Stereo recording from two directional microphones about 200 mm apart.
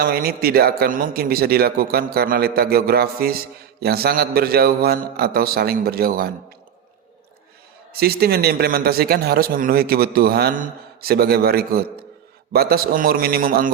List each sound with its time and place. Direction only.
0.0 s a man's voice: 50° right (ahead or behind)
7.9 s a man's voice: 50° right (ahead or behind)